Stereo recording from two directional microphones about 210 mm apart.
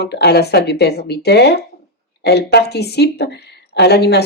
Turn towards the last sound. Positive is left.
turn(degrees=50)  # may be behind; listen again after turning